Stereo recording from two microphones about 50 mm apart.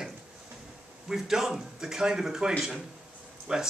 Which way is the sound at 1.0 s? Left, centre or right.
Centre.